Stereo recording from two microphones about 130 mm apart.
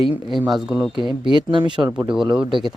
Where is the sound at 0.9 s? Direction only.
40° left (ahead or behind).